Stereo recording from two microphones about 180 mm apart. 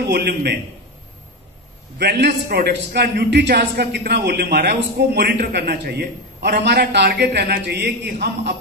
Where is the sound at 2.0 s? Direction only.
65° right (ahead or behind).